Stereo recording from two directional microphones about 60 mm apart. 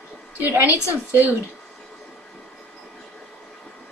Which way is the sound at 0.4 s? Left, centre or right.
Right.